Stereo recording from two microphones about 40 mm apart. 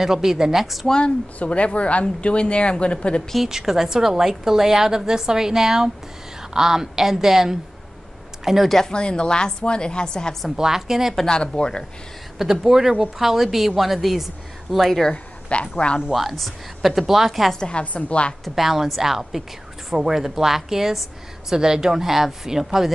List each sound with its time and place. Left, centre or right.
0.0 s a woman's voice: centre
0.8 s a woman's voice: left
3.4 s a woman's voice: centre
8.6 s speech: centre
8.9 s a woman's voice: left
10.5 s a woman's voice: centre
11.2 s a woman's voice: centre
12.4 s a woman's voice: centre
15.5 s a woman's voice: left
16.1 s a woman's voice: centre
17.6 s a woman's voice: left
18.5 s a woman's voice: centre